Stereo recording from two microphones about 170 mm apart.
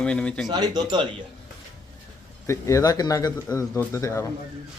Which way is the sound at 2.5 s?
20° left (ahead or behind).